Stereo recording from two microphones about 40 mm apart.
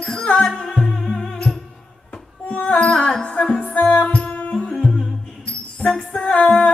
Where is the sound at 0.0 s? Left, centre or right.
Left.